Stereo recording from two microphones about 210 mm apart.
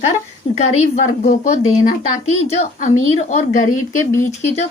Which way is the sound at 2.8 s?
35° left (ahead or behind).